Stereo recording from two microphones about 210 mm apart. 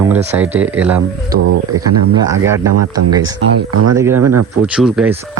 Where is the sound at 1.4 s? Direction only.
90° right.